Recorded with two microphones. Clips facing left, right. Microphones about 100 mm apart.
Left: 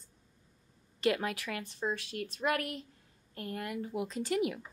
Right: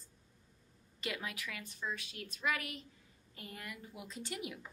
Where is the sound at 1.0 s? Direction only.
65° left (ahead or behind).